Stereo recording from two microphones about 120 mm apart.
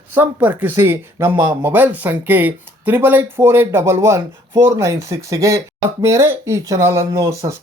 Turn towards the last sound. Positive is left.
turn(degrees=-25)  # may be behind; listen again after turning